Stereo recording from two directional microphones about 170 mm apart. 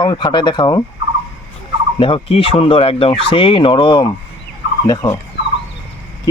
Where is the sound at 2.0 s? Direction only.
30° left (ahead or behind).